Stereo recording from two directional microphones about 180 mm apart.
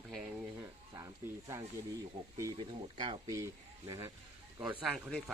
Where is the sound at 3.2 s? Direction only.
20° right (ahead or behind).